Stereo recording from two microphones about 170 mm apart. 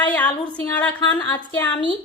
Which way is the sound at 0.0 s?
10° left (ahead or behind).